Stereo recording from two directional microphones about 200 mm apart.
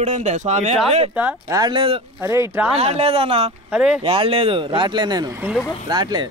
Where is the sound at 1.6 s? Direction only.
25° right (ahead or behind).